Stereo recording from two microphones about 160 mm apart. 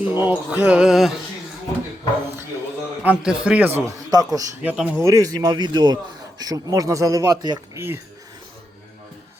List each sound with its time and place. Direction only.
0.1 s a man's voice: 10° right (ahead or behind)
3.0 s a man's voice: 10° right (ahead or behind)
4.6 s a man's voice: 10° right (ahead or behind)
4.9 s speech: 20° right (ahead or behind)